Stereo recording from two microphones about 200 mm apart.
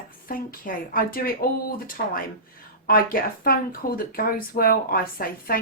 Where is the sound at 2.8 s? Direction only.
45° left (ahead or behind).